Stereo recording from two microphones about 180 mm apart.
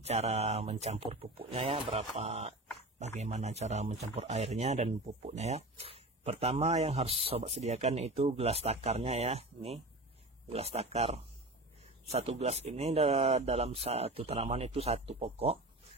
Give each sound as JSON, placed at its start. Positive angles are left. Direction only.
{"t": 0.0, "sound": "speech", "side_deg": -35}